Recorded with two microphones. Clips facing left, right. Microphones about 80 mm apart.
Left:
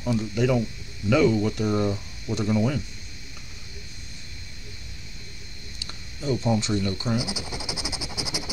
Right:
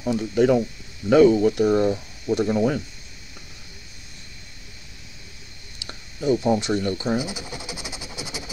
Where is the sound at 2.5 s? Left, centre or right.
Right.